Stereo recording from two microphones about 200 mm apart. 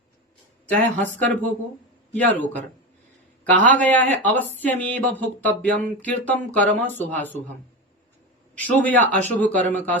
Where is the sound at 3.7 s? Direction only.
10° left (ahead or behind).